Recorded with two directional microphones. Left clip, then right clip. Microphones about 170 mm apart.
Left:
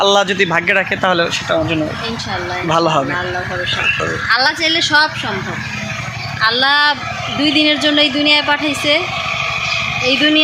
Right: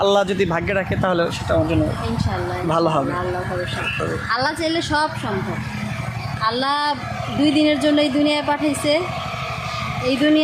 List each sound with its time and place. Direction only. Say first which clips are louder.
0.0 s a man's voice: left 5 dB; 5° left (ahead or behind)
2.6 s speech: left 5 dB; 15° left (ahead or behind)
4.3 s a woman's voice: left 8 dB; 15° right (ahead or behind)
6.4 s a woman's voice: left 8 dB; 10° right (ahead or behind)
10.1 s a woman's voice: left 4 dB; 10° right (ahead or behind)